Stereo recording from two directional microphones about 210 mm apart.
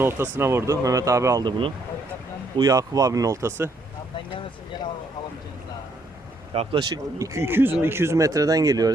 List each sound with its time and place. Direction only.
0.0 s speech: 10° right (ahead or behind)
6.5 s speech: 25° right (ahead or behind)